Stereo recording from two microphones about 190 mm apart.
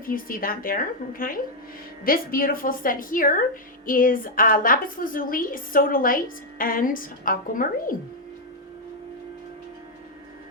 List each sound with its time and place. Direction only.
0.0 s a woman's voice: 50° left (ahead or behind)